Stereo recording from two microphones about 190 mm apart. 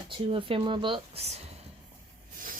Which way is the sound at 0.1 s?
30° right (ahead or behind).